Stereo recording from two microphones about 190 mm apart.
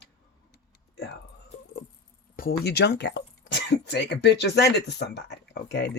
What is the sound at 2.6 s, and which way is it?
Speech, 60° left (ahead or behind).